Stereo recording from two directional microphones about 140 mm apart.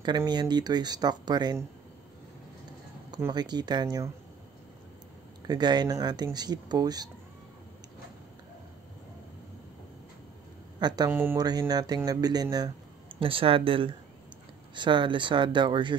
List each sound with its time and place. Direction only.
0.0 s speech: 30° right (ahead or behind)
3.3 s speech: 30° right (ahead or behind)
5.5 s speech: 30° right (ahead or behind)
10.8 s speech: 30° right (ahead or behind)
11.1 s speech: 15° right (ahead or behind)
11.3 s speech: 30° right (ahead or behind)
13.2 s speech: 40° right (ahead or behind)